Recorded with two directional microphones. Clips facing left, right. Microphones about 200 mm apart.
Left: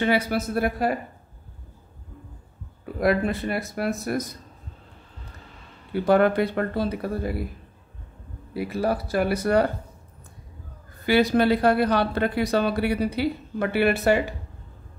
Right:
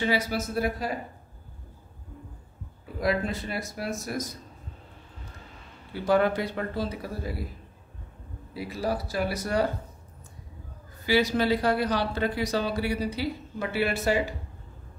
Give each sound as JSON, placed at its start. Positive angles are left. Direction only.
{"t": 0.0, "sound": "speech", "side_deg": 60}
{"t": 2.8, "sound": "speech", "side_deg": 60}
{"t": 5.9, "sound": "speech", "side_deg": 60}
{"t": 8.5, "sound": "speech", "side_deg": 60}
{"t": 11.1, "sound": "speech", "side_deg": 55}